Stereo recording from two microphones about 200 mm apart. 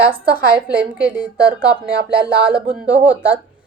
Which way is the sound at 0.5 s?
5° right (ahead or behind).